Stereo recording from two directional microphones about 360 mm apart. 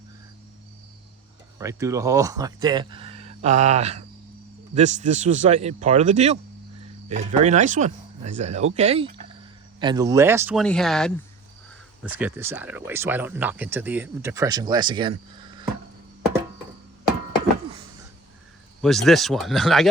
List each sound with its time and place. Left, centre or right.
1.5 s speech: centre
18.8 s speech: centre